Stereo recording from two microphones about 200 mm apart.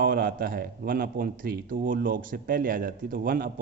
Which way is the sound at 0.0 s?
45° right (ahead or behind).